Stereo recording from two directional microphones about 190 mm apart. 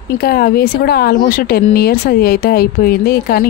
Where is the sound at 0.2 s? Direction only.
55° left (ahead or behind).